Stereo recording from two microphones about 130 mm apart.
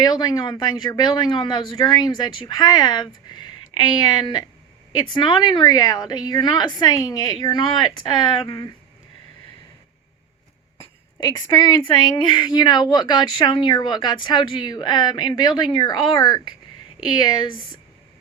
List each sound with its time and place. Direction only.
0.0 s a woman's voice: 30° left (ahead or behind)
11.2 s a woman's voice: 30° left (ahead or behind)